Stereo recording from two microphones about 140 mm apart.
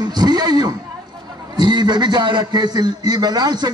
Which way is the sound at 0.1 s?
30° right (ahead or behind).